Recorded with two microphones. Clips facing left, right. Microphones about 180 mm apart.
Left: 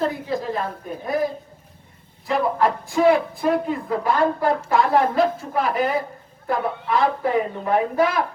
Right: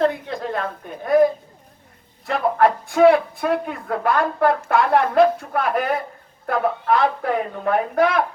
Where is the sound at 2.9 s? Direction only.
60° right (ahead or behind).